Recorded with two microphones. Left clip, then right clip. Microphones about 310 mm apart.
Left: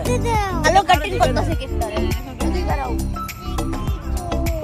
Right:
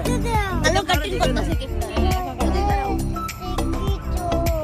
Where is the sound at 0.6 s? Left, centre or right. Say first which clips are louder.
Left 7 dB; centre.